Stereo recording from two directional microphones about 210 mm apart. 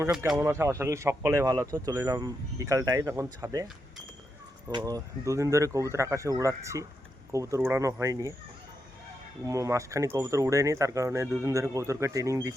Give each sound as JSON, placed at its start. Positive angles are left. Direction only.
{"t": 0.0, "sound": "speech", "side_deg": -10}
{"t": 4.9, "sound": "speech", "side_deg": -15}
{"t": 9.4, "sound": "speech", "side_deg": -15}